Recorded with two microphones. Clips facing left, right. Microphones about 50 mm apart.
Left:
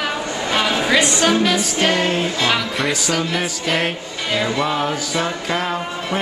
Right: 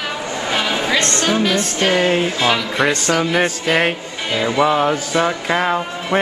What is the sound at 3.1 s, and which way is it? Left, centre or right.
Music, centre.